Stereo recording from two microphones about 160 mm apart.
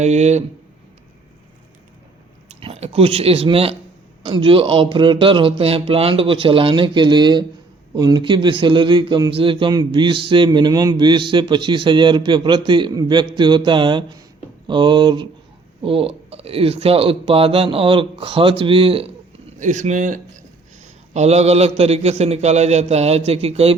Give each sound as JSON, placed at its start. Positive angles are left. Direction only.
{"t": 0.0, "sound": "speech", "side_deg": -45}
{"t": 2.5, "sound": "a man's voice", "side_deg": -40}
{"t": 19.5, "sound": "speech", "side_deg": -50}